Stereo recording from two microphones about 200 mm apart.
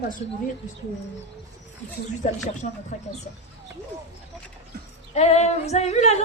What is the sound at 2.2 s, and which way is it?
Speech, 35° left (ahead or behind).